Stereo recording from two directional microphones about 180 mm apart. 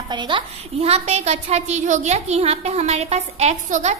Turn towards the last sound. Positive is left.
turn(degrees=-40)  # may be behind; listen again after turning